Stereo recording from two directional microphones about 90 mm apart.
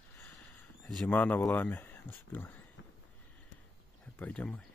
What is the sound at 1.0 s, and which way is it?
Speech, 20° left (ahead or behind).